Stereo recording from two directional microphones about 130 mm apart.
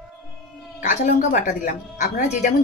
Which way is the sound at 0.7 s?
80° left.